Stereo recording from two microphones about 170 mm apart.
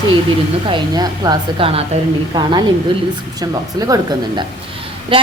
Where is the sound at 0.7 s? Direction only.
25° right (ahead or behind).